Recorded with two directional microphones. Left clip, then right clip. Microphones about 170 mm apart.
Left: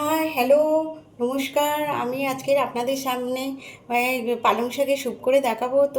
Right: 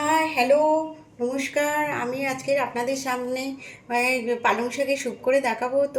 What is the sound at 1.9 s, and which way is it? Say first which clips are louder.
A woman's voice: left 2 dB; 10° right (ahead or behind).